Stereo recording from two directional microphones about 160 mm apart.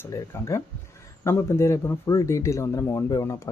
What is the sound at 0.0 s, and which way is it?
Speech, 15° left (ahead or behind).